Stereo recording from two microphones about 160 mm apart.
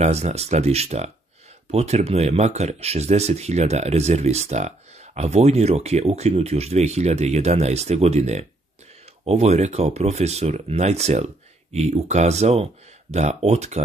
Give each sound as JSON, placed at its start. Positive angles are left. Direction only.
{"t": 0.0, "sound": "speech", "side_deg": -40}